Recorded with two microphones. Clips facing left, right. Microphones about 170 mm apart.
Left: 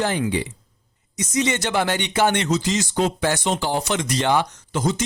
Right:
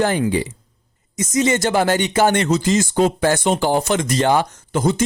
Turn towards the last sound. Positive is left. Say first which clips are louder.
# right 4 dB
turn(degrees=-55)  # may be behind; listen again after turning